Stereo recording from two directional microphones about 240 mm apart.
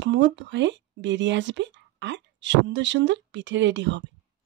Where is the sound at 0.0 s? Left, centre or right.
Right.